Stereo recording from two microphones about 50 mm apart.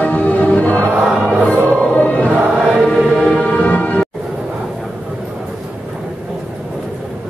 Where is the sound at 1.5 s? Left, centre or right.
Left.